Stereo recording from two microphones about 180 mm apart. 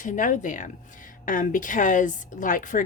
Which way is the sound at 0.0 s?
45° left (ahead or behind).